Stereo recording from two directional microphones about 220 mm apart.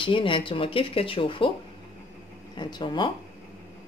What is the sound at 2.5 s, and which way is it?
Speech, 20° left (ahead or behind).